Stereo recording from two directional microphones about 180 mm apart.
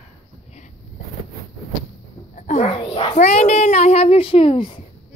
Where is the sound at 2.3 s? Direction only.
40° left (ahead or behind).